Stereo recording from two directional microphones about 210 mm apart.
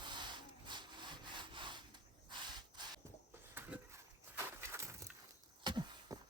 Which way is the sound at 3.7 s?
5° right (ahead or behind).